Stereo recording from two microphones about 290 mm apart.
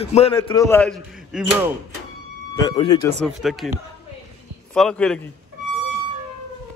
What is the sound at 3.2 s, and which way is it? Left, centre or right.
Speech, centre.